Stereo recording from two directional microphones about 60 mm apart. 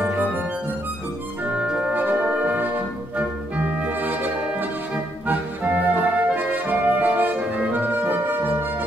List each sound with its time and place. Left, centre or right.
0.0 s music: right
1.9 s music: right
3.2 s brass instrument: right